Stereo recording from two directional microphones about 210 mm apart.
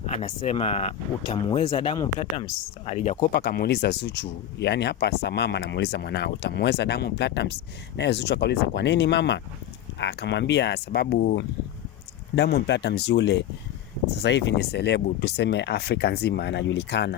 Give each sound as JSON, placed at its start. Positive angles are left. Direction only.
{"t": 0.0, "sound": "speech", "side_deg": 30}